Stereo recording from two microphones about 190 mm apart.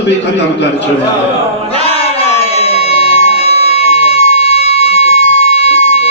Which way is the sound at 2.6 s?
30° left (ahead or behind).